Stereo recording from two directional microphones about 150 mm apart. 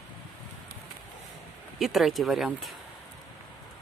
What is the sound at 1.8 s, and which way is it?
Speech, centre (ahead or behind).